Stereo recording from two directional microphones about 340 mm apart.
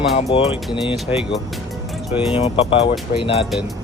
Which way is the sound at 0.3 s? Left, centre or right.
Centre.